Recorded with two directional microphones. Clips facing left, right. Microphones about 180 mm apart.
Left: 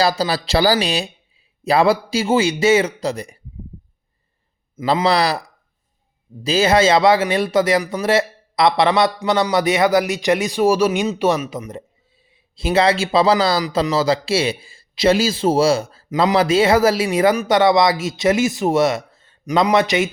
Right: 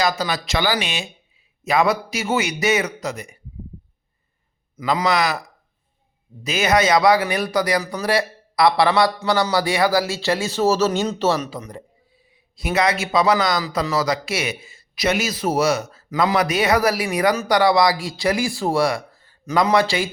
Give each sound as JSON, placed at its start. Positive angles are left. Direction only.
{"t": 0.0, "sound": "speech", "side_deg": 30}
{"t": 4.8, "sound": "speech", "side_deg": 30}
{"t": 6.4, "sound": "speech", "side_deg": 30}
{"t": 12.5, "sound": "speech", "side_deg": 30}